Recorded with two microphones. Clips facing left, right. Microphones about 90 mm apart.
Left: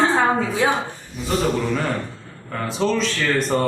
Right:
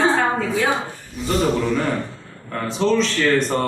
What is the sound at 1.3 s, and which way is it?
A man's voice, centre (ahead or behind).